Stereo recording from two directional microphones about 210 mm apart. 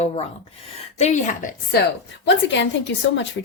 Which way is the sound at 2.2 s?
60° left (ahead or behind).